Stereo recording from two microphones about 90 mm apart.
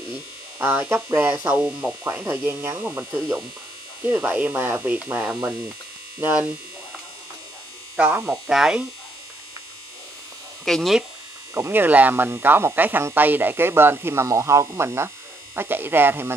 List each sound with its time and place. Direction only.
0.1 s electric shaver: 15° right (ahead or behind)
1.1 s speech: 20° right (ahead or behind)
8.3 s speech: 5° right (ahead or behind)
10.6 s speech: centre (ahead or behind)
11.5 s speech: 25° right (ahead or behind)